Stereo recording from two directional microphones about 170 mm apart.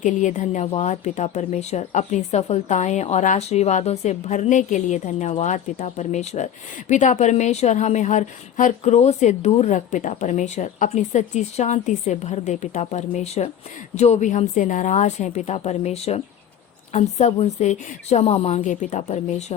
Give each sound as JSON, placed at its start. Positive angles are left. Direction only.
{"t": 0.0, "sound": "a woman's voice", "side_deg": 45}